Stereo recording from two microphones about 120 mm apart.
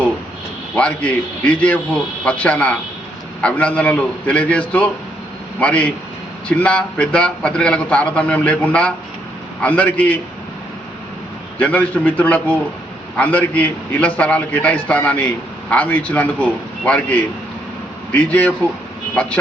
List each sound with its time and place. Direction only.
0.8 s a man's voice: 10° left (ahead or behind)
11.6 s a man's voice: 10° left (ahead or behind)